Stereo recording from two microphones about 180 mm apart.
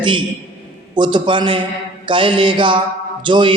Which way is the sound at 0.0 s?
25° right (ahead or behind).